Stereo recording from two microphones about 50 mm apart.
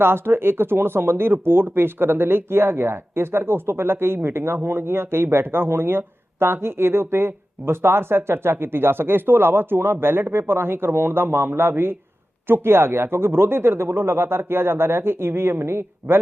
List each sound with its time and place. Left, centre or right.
0.0 s speech: right